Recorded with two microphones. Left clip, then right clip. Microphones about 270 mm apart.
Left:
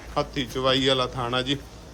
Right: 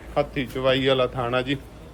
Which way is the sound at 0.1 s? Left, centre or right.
Centre.